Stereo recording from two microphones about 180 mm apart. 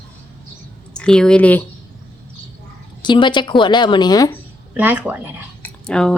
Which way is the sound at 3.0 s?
25° left (ahead or behind).